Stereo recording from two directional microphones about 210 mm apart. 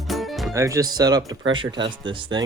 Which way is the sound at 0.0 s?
Centre (ahead or behind).